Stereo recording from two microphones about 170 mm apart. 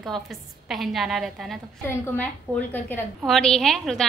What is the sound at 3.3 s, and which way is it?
Speech, centre (ahead or behind).